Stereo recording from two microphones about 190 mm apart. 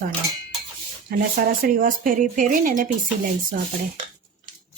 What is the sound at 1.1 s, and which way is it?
Speech, 50° right (ahead or behind).